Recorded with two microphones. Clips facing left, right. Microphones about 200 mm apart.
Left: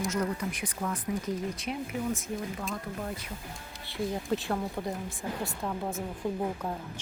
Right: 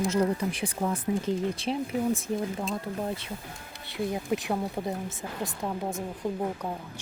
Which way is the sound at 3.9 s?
15° right (ahead or behind).